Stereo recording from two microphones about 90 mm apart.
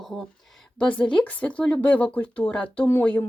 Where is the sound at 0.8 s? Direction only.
10° left (ahead or behind).